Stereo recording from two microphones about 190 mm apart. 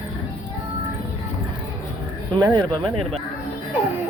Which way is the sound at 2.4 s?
20° right (ahead or behind).